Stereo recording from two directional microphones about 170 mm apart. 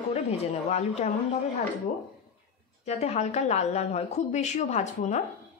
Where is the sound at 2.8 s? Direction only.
40° left (ahead or behind).